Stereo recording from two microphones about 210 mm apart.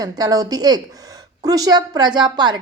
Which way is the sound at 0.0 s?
20° right (ahead or behind).